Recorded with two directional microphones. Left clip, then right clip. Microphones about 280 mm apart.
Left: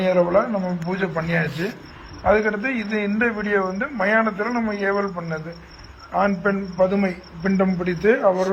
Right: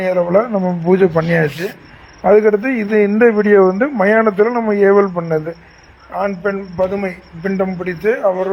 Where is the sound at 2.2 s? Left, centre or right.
Right.